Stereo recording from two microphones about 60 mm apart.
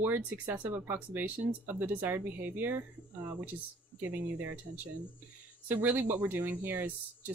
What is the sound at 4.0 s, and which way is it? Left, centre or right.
Speech, right.